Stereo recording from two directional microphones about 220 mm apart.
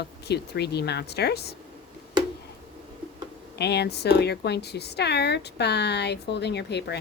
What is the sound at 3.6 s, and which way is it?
Speech, 50° left (ahead or behind).